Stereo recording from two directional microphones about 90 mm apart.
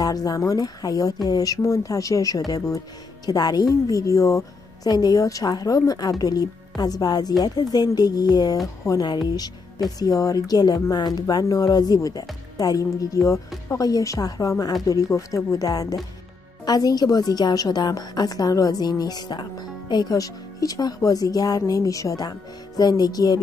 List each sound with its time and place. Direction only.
0.0 s a woman's voice: 45° left (ahead or behind)